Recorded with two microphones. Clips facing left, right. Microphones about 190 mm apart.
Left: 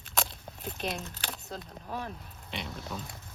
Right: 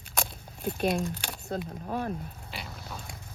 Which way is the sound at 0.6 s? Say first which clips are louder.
Right 8 dB; 45° right (ahead or behind).